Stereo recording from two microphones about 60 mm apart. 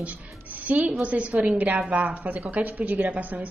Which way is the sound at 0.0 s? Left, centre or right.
Right.